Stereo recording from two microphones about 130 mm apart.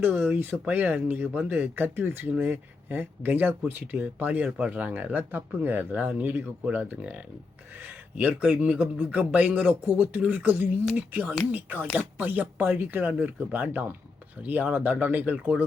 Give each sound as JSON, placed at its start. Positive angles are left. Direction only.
{"t": 0.0, "sound": "speech", "side_deg": -15}